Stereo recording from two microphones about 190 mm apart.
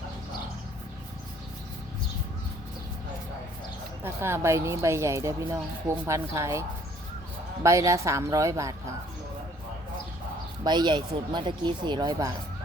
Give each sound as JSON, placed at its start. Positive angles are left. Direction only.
{"t": 4.0, "sound": "speech", "side_deg": -15}
{"t": 10.6, "sound": "speech", "side_deg": -25}